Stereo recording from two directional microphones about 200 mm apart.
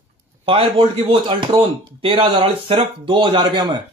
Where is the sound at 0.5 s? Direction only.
25° right (ahead or behind).